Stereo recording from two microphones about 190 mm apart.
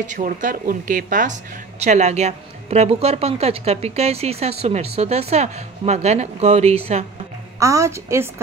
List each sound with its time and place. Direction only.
0.0 s a woman's voice: 40° right (ahead or behind)
7.5 s a woman's voice: 15° right (ahead or behind)